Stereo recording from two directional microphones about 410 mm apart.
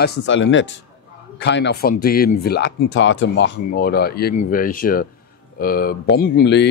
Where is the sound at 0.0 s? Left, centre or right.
Left.